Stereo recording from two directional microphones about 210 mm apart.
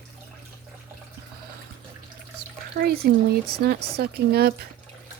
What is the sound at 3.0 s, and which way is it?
Speech, 50° right (ahead or behind).